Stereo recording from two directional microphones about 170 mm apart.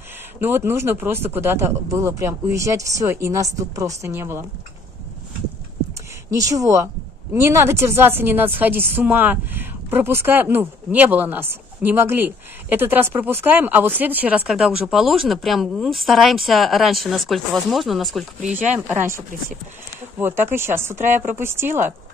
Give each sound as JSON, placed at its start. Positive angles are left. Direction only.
{"t": 0.4, "sound": "a woman's voice", "side_deg": -15}
{"t": 6.3, "sound": "a woman's voice", "side_deg": -20}